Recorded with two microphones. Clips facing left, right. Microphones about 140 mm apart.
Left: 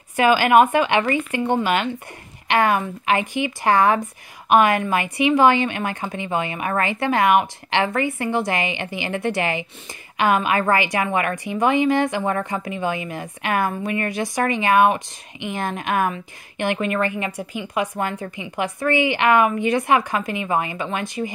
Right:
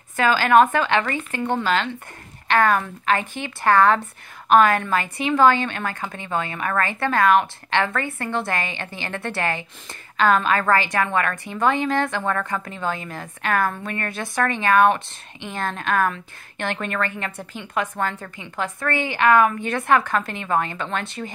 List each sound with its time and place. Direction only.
0.1 s a woman's voice: 15° left (ahead or behind)
12.4 s a woman's voice: 25° left (ahead or behind)
12.6 s a woman's voice: 15° left (ahead or behind)